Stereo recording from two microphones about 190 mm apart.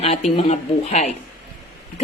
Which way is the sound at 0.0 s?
35° left (ahead or behind).